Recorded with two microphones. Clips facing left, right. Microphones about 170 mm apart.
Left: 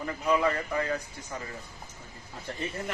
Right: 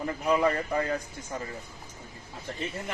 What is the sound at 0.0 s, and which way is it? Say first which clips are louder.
Speech: right 1 dB; 30° right (ahead or behind).